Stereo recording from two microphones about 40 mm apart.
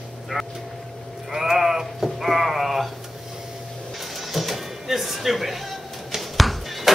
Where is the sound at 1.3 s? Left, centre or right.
Centre.